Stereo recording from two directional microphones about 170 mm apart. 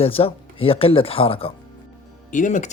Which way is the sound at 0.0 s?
35° left (ahead or behind).